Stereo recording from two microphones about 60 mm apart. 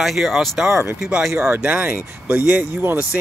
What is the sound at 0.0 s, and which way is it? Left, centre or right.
Speech, centre.